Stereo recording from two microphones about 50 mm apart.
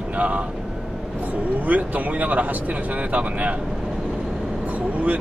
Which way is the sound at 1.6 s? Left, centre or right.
Right.